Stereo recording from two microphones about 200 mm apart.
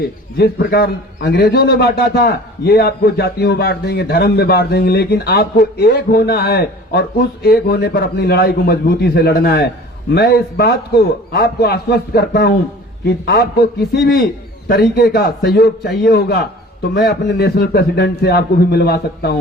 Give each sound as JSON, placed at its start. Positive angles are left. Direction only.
{"t": 0.3, "sound": "a man's voice", "side_deg": 55}